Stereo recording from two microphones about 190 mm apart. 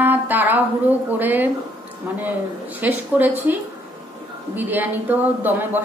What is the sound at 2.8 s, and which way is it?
Speech, 10° right (ahead or behind).